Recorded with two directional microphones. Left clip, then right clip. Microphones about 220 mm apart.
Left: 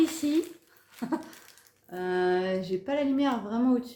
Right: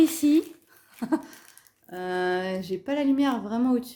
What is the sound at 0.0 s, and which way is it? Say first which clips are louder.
Speech: right 5 dB; 40° right (ahead or behind).